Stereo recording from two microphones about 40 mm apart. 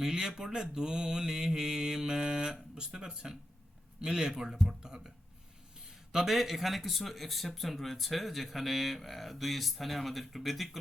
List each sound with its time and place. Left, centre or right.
0.0 s mantra: centre
6.1 s a man's voice: centre